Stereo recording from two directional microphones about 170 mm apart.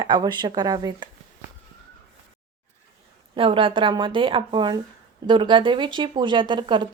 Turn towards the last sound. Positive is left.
turn(degrees=-30)  # may be behind; listen again after turning